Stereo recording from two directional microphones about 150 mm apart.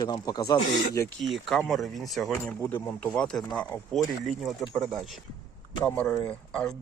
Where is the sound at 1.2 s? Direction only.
Centre (ahead or behind).